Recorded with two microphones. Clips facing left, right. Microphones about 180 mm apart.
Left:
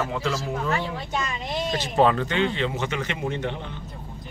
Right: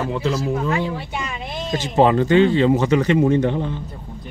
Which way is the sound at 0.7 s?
15° right (ahead or behind).